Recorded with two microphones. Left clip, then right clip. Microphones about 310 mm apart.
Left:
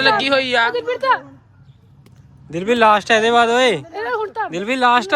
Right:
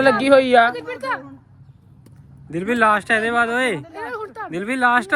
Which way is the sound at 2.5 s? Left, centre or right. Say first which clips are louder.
Left 4 dB; centre.